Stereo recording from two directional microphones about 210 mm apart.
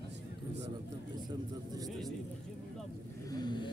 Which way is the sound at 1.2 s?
20° right (ahead or behind).